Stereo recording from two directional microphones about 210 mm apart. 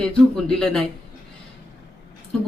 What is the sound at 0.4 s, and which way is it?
Speech, 5° left (ahead or behind).